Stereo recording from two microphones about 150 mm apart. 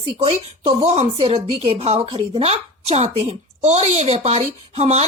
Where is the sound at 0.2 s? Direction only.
40° right (ahead or behind).